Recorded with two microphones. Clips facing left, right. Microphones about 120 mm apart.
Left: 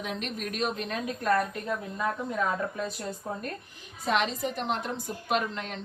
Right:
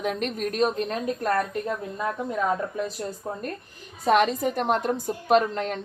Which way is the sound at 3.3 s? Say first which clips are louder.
Right 1 dB; 25° right (ahead or behind).